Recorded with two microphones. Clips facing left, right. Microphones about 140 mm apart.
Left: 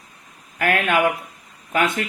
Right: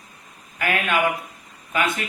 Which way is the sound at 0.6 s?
55° left (ahead or behind).